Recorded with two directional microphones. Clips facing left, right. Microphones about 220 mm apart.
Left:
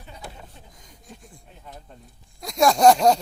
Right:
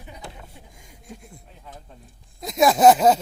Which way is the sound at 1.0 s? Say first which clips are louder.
Right 4 dB; 10° right (ahead or behind).